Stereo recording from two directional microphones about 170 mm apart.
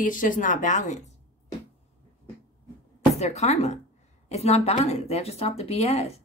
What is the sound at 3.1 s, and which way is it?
Speech, 40° left (ahead or behind).